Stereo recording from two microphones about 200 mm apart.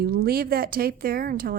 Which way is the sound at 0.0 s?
50° right (ahead or behind).